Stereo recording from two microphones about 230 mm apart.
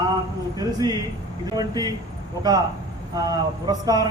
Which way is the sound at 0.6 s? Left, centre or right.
Centre.